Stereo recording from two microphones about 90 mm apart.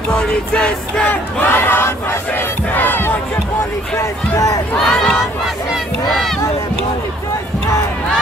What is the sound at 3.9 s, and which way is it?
Run, 35° left (ahead or behind).